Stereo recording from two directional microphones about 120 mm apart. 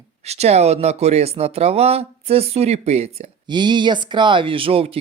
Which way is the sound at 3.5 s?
40° right (ahead or behind).